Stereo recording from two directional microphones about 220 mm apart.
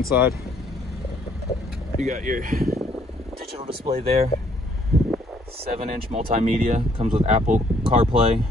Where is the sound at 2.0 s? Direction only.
35° right (ahead or behind).